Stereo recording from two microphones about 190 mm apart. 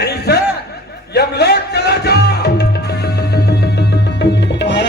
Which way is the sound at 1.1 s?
60° left (ahead or behind).